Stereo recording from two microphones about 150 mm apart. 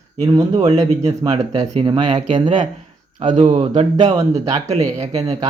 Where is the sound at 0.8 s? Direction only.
20° right (ahead or behind).